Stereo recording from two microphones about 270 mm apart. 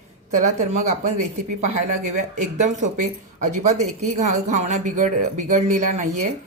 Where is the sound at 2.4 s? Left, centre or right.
Right.